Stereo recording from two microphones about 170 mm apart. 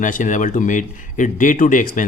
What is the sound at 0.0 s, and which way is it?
A man's voice, 50° left (ahead or behind).